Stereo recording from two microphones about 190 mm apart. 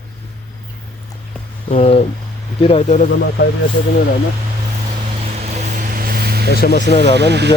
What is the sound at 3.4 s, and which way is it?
Speech, 70° left (ahead or behind).